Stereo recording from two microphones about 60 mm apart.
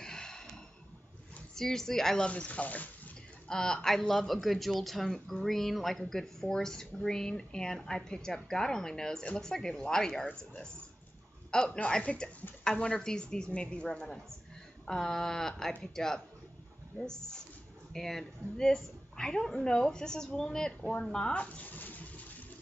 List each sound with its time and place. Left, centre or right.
0.0 s gasp: centre
1.5 s speech: centre
2.2 s speech: left
3.4 s a woman's voice: centre; by 22.2 s left